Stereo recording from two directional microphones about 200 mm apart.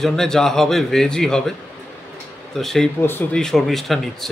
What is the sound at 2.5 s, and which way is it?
A man's voice, centre (ahead or behind).